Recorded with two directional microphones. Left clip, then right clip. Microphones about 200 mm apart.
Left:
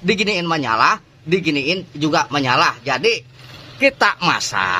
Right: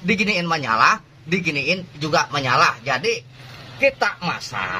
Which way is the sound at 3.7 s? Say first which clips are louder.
Left 4 dB; 55° left (ahead or behind).